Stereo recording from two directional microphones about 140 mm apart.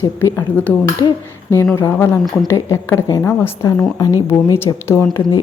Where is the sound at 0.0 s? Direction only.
20° left (ahead or behind).